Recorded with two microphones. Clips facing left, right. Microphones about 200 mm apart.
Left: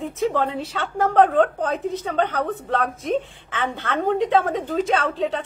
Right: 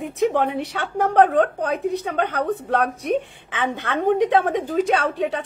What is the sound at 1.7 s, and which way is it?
A woman's voice, 10° right (ahead or behind).